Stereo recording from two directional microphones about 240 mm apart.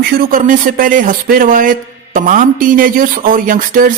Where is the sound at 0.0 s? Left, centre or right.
Right.